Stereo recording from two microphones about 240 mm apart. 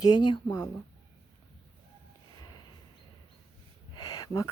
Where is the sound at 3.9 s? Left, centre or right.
Centre.